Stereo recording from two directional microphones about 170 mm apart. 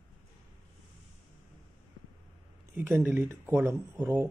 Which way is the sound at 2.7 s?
15° right (ahead or behind).